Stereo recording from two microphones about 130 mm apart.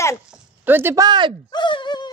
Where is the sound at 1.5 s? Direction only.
35° left (ahead or behind).